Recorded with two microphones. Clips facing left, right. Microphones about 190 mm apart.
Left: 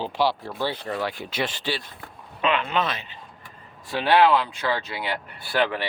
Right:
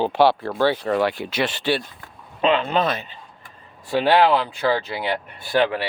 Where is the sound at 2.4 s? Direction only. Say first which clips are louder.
Right 4 dB; 30° right (ahead or behind).